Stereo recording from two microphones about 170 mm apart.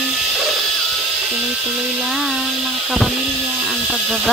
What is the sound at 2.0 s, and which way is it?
Speech, centre (ahead or behind).